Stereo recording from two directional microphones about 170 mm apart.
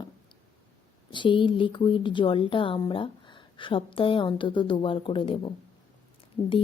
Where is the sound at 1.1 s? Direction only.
30° left (ahead or behind).